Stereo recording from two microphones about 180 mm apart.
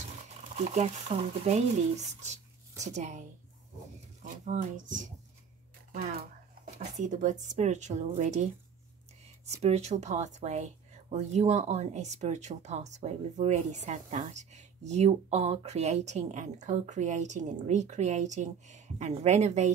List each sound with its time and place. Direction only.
0.7 s speech: 40° right (ahead or behind)
2.8 s speech: 40° right (ahead or behind)
6.6 s speech: 45° right (ahead or behind)
9.6 s speech: 35° right (ahead or behind)